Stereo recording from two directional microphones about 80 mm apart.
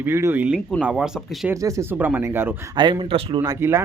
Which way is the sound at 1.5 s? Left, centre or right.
Right.